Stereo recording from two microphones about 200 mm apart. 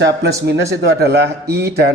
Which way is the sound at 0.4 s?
55° right (ahead or behind).